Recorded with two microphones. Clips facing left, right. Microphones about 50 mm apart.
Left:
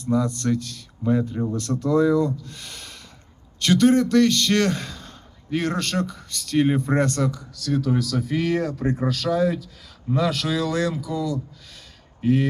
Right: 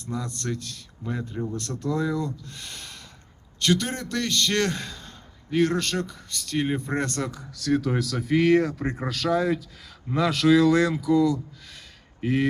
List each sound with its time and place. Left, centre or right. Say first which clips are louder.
0.1 s a man's voice: left 9 dB; centre
5.0 s gasp: left 4 dB; centre
5.6 s a man's voice: left 1 dB; centre
7.2 s speech: left 5 dB; right